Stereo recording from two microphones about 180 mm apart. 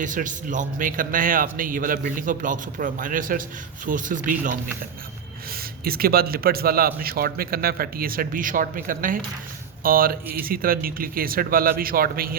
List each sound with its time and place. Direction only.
0.0 s a man's voice: 45° right (ahead or behind)